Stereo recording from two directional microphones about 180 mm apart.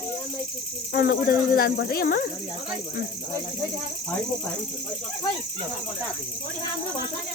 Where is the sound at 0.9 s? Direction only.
60° left (ahead or behind).